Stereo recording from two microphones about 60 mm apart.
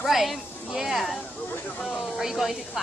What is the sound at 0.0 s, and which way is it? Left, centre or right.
Speech, centre.